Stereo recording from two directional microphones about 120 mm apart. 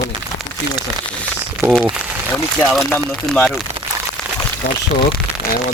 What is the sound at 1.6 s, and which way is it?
Speech, 20° right (ahead or behind).